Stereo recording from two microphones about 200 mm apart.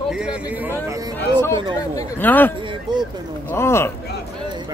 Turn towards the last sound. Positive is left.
turn(degrees=15)  # may be behind; listen again after turning